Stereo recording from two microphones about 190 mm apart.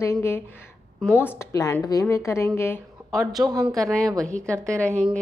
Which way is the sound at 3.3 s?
20° right (ahead or behind).